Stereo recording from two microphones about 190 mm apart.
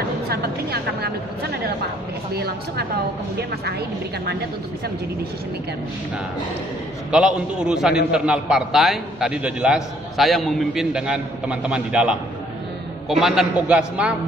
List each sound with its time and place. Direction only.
0.3 s a woman's voice: 55° right (ahead or behind)
7.1 s a man's voice: 5° right (ahead or behind)